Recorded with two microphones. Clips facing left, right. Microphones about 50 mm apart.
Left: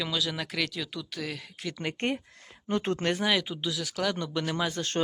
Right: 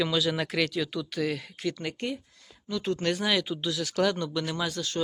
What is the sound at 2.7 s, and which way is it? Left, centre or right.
Speech, left.